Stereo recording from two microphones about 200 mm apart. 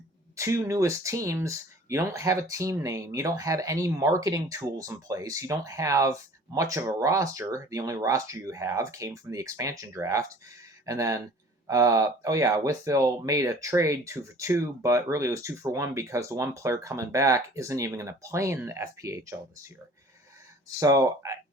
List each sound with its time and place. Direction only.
0.3 s speech: 15° right (ahead or behind)
20.7 s speech: 15° right (ahead or behind)